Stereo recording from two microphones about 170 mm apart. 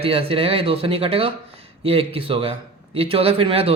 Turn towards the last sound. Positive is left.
turn(degrees=-35)  # may be behind; listen again after turning